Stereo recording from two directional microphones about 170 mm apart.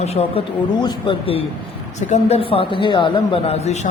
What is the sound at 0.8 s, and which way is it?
Speech, 25° left (ahead or behind).